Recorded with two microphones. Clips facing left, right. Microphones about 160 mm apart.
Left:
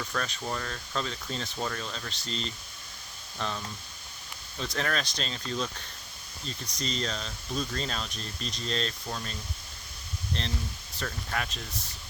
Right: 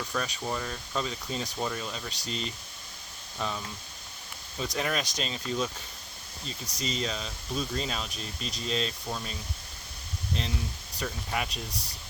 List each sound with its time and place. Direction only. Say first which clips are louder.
0.0 s speech: right 1 dB; 10° right (ahead or behind)
6.7 s speech: right 1 dB; 5° right (ahead or behind)
11.7 s speech: right 1 dB; 35° right (ahead or behind)